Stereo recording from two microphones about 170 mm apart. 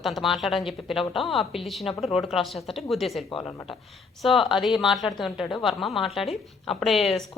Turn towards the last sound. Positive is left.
turn(degrees=0)  # may be behind; listen again after turning